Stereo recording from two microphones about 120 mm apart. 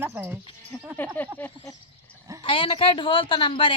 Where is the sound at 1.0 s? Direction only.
15° left (ahead or behind).